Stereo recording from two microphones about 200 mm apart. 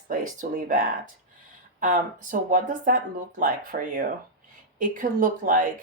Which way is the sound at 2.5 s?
40° right (ahead or behind).